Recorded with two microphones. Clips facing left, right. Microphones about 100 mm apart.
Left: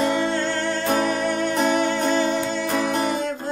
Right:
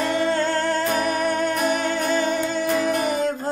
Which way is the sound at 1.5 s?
30° left (ahead or behind).